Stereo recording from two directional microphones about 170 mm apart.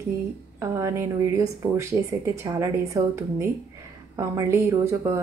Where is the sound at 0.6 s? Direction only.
15° right (ahead or behind).